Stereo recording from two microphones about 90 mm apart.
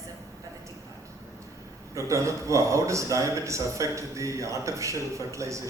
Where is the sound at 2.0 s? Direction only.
35° right (ahead or behind).